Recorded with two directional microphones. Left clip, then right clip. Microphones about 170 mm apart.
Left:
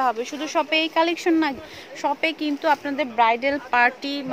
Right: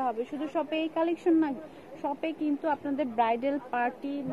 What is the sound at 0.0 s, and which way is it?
Speech, 30° left (ahead or behind).